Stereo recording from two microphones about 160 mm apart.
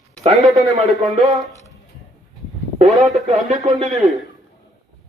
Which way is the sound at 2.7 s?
45° right (ahead or behind).